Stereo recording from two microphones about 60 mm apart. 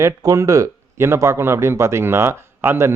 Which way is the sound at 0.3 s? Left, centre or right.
Right.